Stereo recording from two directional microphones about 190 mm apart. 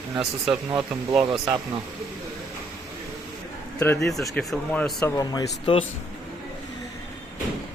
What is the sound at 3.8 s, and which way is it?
Speech, 5° left (ahead or behind).